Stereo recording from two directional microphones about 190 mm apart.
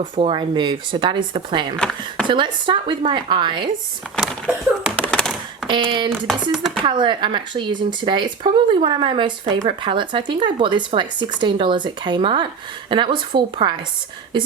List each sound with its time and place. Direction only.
0.0 s speech: 30° right (ahead or behind)
1.7 s speech: 5° left (ahead or behind)
2.2 s speech: 25° right (ahead or behind)
4.9 s a sound: 5° left (ahead or behind)
5.6 s speech: 25° right (ahead or behind)
6.2 s speech: centre (ahead or behind)
6.8 s speech: 25° right (ahead or behind)